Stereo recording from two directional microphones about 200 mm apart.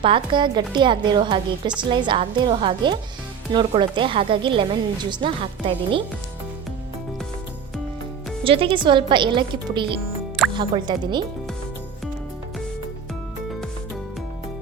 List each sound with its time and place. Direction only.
0.0 s a woman's voice: 25° right (ahead or behind)
8.4 s a woman's voice: 25° right (ahead or behind)